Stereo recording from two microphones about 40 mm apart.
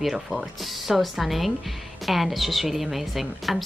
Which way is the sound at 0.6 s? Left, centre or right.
Centre.